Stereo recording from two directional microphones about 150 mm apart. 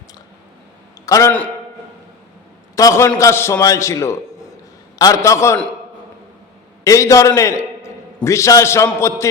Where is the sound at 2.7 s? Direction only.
20° left (ahead or behind).